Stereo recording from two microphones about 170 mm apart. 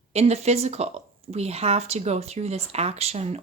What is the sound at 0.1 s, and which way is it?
A woman's voice, 40° right (ahead or behind).